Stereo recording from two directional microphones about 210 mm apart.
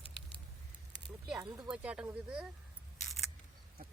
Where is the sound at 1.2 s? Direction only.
5° right (ahead or behind).